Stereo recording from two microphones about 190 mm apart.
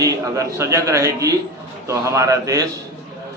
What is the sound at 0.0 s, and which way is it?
A man's voice, 15° right (ahead or behind).